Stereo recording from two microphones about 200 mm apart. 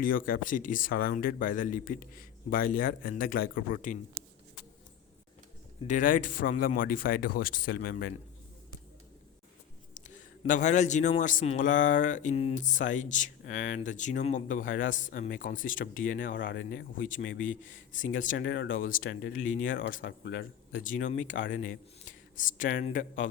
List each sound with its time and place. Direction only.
0.0 s speech: 45° left (ahead or behind)
5.9 s speech: 40° left (ahead or behind)
9.9 s a sound: 40° left (ahead or behind)
11.2 s speech: 40° left (ahead or behind); by 17.4 s 70° left (ahead or behind)
17.9 s speech: 40° left (ahead or behind)
18.3 s speech: 60° left (ahead or behind)
18.8 s speech: 45° left (ahead or behind)
19.8 s speech: 70° left (ahead or behind)
20.8 s speech: 40° left (ahead or behind)
21.3 s speech: 70° left (ahead or behind)
22.4 s speech: 40° left (ahead or behind)